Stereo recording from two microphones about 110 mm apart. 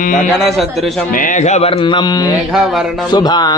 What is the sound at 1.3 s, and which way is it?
Speech, 90° left.